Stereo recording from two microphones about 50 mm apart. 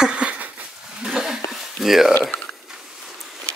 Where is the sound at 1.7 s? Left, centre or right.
Centre.